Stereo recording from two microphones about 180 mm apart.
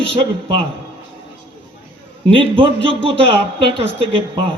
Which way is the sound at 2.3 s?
30° right (ahead or behind).